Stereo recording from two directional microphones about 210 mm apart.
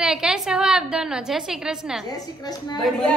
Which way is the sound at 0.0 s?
5° right (ahead or behind).